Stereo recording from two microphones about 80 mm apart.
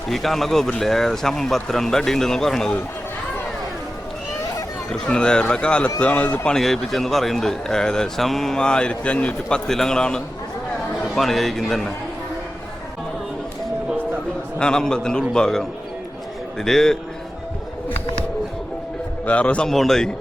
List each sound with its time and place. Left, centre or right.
0.1 s speech: centre
4.9 s a man's voice: centre
9.6 s a man's voice: centre
14.6 s a man's voice: centre
19.2 s a man's voice: centre
19.7 s speech: centre